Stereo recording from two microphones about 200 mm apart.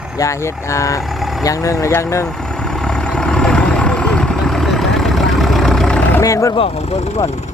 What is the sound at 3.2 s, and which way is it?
Vehicle, 5° left (ahead or behind).